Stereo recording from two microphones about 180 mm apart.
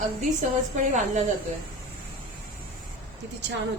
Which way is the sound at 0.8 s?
45° right (ahead or behind).